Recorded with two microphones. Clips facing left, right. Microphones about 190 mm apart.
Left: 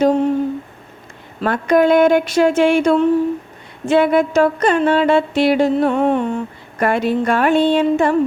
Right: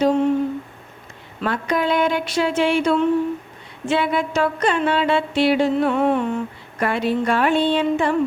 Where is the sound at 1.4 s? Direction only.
50° left (ahead or behind).